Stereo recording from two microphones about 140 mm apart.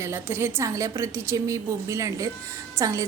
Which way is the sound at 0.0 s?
15° right (ahead or behind).